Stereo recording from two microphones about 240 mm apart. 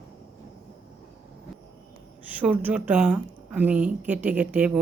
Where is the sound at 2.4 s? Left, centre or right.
Centre.